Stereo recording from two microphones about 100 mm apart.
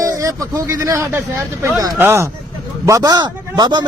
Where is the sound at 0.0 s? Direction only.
30° right (ahead or behind).